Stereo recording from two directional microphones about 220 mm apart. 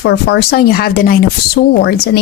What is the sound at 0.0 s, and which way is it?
Speech, 45° left (ahead or behind).